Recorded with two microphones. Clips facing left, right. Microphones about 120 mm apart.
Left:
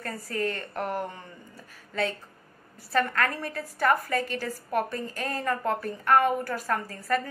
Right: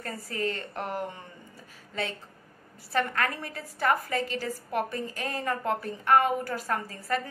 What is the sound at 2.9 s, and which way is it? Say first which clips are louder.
A woman's voice: left 2 dB; 15° right (ahead or behind).